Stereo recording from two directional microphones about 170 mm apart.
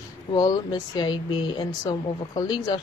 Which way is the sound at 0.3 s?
25° left (ahead or behind).